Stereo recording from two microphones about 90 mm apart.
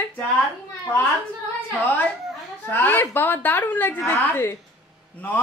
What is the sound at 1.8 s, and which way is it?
A man's voice, 20° left (ahead or behind).